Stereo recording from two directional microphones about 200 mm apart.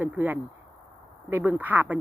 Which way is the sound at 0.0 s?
10° right (ahead or behind).